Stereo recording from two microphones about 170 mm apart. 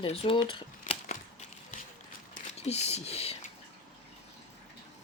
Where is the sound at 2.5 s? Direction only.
40° left (ahead or behind).